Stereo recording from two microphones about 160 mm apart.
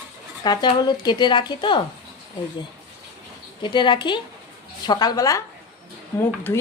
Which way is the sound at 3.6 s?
30° left (ahead or behind).